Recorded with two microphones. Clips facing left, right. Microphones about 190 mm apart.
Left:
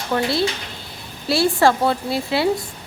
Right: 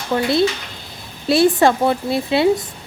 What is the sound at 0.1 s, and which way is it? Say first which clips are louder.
A woman's voice: right 4 dB; 20° right (ahead or behind).